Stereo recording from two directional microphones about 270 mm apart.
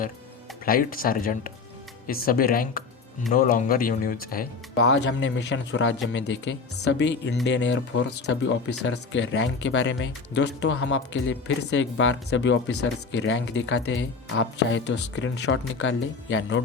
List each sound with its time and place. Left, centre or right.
0.6 s speech: left
4.8 s speech: left